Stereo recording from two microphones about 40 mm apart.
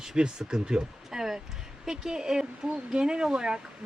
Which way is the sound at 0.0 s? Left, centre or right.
Centre.